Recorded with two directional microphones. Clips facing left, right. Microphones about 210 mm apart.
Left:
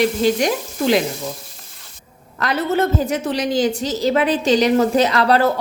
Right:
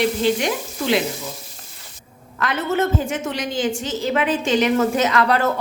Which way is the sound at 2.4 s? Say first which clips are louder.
Left 2 dB; 35° left (ahead or behind).